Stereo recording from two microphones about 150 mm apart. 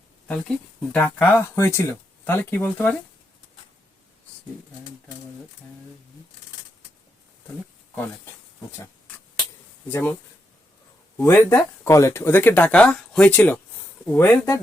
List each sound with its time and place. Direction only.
0.9 s speech: 10° left (ahead or behind)
9.9 s speech: 15° left (ahead or behind)
11.2 s speech: 15° left (ahead or behind)